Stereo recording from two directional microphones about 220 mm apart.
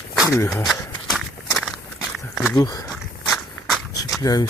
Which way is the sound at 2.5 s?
20° left (ahead or behind).